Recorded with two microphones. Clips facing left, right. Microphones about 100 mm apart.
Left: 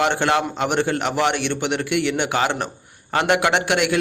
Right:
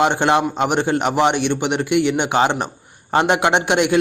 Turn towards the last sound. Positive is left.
turn(degrees=-20)  # may be behind; listen again after turning